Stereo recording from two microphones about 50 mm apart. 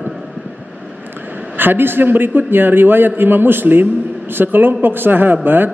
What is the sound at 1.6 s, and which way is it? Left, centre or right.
A man's voice, right.